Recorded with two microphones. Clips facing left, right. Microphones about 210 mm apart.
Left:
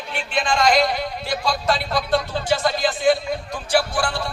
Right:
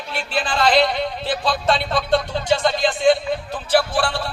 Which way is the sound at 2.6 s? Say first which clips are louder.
Right 2 dB; 25° right (ahead or behind).